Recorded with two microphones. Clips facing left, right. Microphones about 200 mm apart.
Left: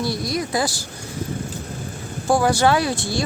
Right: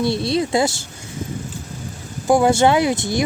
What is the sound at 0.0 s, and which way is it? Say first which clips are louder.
Speech: right 5 dB; 25° right (ahead or behind).